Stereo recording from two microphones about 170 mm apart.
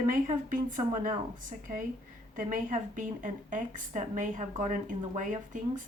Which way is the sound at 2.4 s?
50° right (ahead or behind).